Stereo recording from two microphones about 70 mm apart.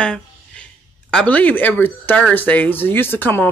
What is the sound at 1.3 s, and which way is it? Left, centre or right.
Speech, left.